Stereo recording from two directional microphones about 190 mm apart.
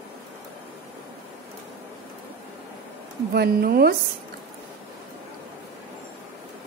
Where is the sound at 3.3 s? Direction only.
55° right (ahead or behind).